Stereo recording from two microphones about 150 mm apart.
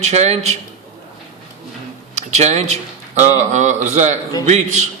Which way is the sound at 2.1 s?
50° right (ahead or behind).